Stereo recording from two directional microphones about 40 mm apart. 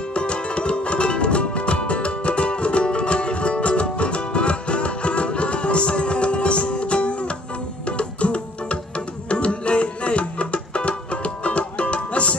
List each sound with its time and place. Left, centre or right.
0.1 s music: left